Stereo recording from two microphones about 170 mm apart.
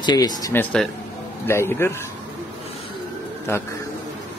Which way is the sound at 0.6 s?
5° left (ahead or behind).